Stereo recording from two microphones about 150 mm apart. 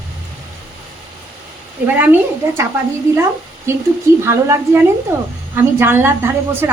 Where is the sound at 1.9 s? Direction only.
10° right (ahead or behind).